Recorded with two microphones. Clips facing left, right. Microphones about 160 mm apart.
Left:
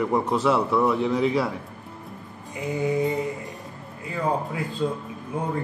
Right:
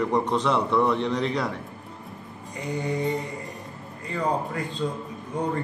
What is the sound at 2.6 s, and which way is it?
Speech, 5° left (ahead or behind).